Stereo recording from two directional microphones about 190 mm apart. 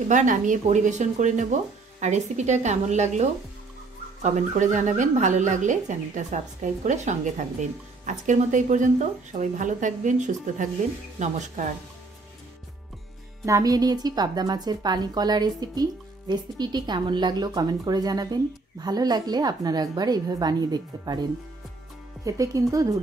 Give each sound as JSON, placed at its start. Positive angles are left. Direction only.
{"t": 0.1, "sound": "speech", "side_deg": -40}
{"t": 13.5, "sound": "a woman's voice", "side_deg": -20}